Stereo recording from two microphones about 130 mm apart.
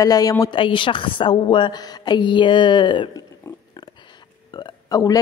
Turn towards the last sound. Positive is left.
turn(degrees=30)  # may be behind; listen again after turning